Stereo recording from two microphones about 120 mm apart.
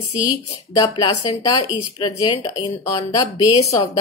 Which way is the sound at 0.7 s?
30° left (ahead or behind).